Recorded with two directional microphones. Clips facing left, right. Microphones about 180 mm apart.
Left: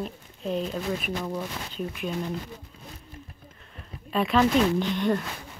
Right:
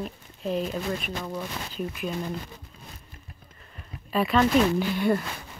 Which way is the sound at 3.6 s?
5° right (ahead or behind).